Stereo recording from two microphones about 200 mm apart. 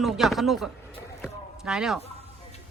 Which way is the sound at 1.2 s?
5° right (ahead or behind).